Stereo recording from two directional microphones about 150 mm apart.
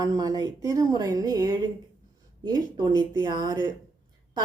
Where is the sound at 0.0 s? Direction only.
25° right (ahead or behind).